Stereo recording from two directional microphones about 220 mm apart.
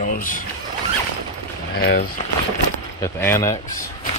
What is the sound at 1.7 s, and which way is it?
Speech, 45° left (ahead or behind).